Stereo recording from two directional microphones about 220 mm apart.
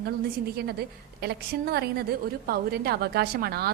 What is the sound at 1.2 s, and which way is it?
A woman's voice, 45° right (ahead or behind).